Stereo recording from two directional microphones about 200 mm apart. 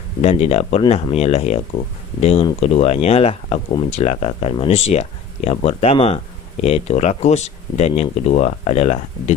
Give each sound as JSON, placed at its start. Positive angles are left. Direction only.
{"t": 0.2, "sound": "speech", "side_deg": 30}